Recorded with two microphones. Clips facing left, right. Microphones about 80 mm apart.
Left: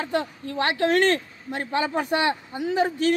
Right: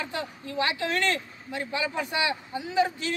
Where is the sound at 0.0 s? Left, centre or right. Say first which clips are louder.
Left 7 dB; left.